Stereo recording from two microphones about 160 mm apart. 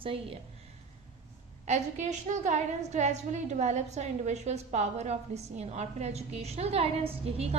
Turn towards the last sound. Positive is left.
turn(degrees=-40)  # may be behind; listen again after turning